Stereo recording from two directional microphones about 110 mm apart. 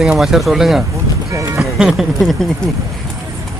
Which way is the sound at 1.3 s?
30° right (ahead or behind).